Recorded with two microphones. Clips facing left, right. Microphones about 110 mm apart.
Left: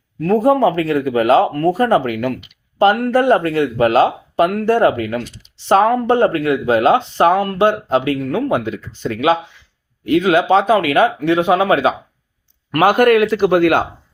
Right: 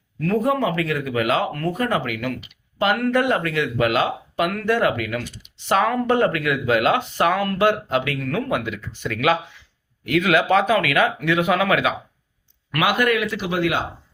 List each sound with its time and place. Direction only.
0.2 s speech: 35° left (ahead or behind)
12.7 s a man's voice: 40° left (ahead or behind)